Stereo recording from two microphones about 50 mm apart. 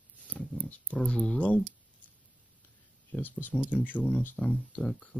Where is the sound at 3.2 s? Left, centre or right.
Left.